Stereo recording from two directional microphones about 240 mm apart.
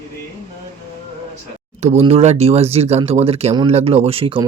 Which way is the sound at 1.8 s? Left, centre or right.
Right.